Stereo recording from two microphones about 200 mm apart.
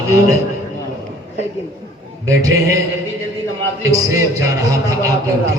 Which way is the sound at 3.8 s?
15° right (ahead or behind).